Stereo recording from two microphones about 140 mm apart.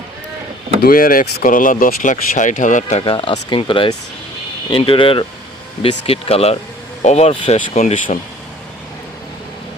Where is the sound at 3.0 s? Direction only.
35° left (ahead or behind).